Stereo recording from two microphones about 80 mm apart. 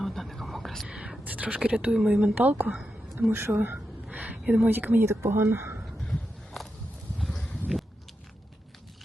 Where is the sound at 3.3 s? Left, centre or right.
Right.